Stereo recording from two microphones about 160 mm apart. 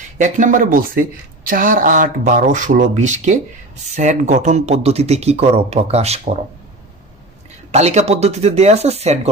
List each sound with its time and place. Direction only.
0.2 s a woman's voice: 50° right (ahead or behind)
7.7 s speech: 45° right (ahead or behind)